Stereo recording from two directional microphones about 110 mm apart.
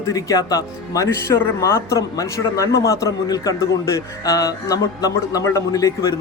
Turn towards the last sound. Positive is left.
turn(degrees=30)  # may be behind; listen again after turning